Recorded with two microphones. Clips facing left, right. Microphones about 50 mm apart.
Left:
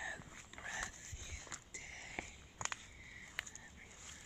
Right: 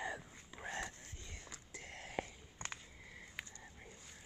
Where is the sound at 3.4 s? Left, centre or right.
Left.